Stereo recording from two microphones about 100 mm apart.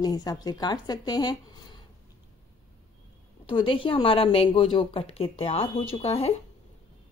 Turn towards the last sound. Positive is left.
turn(degrees=85)